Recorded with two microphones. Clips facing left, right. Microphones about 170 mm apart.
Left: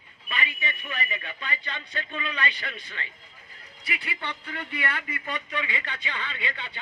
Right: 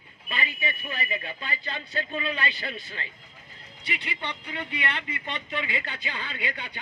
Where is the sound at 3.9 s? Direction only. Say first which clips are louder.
Even; 20° right (ahead or behind).